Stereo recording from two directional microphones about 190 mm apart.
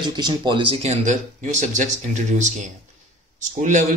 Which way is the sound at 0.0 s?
20° right (ahead or behind).